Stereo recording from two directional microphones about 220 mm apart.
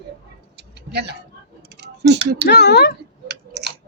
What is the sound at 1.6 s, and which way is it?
Typing, 50° right (ahead or behind).